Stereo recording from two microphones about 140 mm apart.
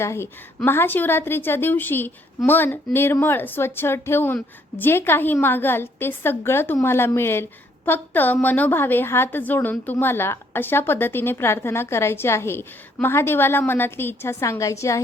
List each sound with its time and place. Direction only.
0.0 s a woman's voice: 20° left (ahead or behind)